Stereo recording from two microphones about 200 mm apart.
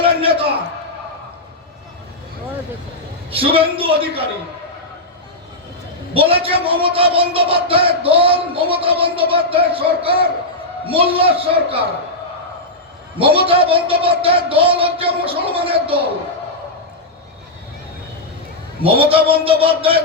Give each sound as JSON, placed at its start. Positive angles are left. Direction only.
{"t": 0.0, "sound": "a sound", "side_deg": -25}
{"t": 3.2, "sound": "a man's voice", "side_deg": -25}
{"t": 6.1, "sound": "a man's voice", "side_deg": -25}
{"t": 13.1, "sound": "a man's voice", "side_deg": -25}
{"t": 18.8, "sound": "a man's voice", "side_deg": -25}